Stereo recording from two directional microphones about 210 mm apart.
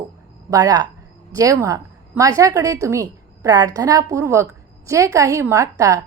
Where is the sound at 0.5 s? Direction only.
15° right (ahead or behind).